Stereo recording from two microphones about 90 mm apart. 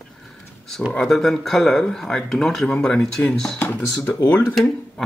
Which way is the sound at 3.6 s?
20° left (ahead or behind).